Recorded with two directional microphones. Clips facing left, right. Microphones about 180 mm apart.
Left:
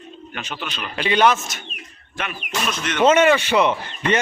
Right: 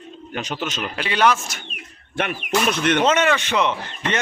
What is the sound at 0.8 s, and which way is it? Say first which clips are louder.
Speech: left 3 dB; 5° right (ahead or behind).